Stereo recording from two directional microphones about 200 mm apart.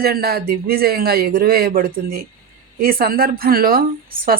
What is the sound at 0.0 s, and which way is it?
Speech, 50° right (ahead or behind).